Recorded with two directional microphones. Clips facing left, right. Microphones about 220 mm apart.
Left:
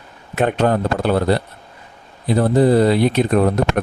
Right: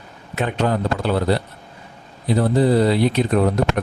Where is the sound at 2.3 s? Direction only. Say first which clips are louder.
Left 3 dB; 50° left (ahead or behind).